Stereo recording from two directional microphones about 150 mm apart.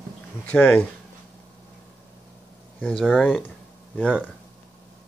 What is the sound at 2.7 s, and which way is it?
Speech, 10° left (ahead or behind).